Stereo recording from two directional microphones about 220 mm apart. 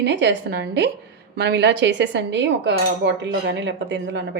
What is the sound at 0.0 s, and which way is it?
Speech, 50° right (ahead or behind).